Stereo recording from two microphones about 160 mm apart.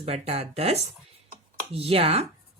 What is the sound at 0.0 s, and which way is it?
A woman's voice, 40° right (ahead or behind).